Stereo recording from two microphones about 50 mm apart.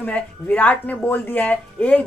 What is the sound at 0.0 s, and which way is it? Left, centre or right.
Speech, left.